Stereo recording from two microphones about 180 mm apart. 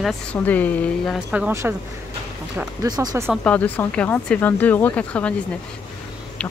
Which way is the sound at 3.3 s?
5° left (ahead or behind).